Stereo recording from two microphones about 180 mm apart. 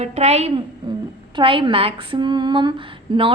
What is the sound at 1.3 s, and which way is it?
A woman's voice, 30° right (ahead or behind).